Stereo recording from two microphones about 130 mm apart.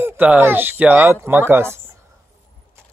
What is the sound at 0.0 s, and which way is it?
Speech, 15° right (ahead or behind).